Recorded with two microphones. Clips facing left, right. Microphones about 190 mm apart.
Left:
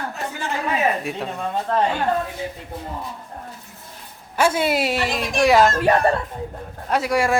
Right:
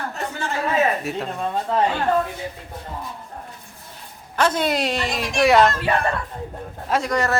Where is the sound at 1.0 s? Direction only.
Centre (ahead or behind).